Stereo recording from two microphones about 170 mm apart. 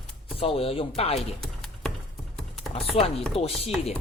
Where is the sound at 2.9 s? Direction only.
35° left (ahead or behind).